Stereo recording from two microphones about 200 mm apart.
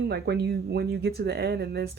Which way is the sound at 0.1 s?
55° right (ahead or behind).